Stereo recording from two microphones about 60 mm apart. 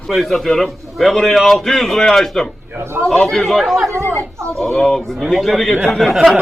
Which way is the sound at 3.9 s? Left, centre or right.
Right.